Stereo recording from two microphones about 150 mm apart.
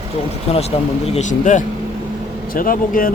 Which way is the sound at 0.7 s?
40° left (ahead or behind).